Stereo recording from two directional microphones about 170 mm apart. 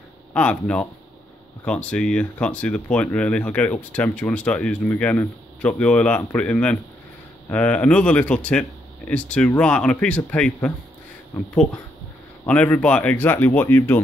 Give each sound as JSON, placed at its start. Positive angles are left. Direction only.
{"t": 0.3, "sound": "speech", "side_deg": 5}
{"t": 12.4, "sound": "speech", "side_deg": 10}